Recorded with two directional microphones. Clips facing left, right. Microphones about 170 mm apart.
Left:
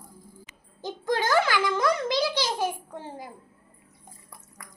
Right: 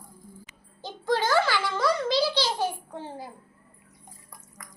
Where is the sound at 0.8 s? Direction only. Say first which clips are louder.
Even; 15° left (ahead or behind).